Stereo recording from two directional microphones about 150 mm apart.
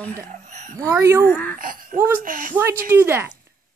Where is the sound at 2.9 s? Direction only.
15° right (ahead or behind).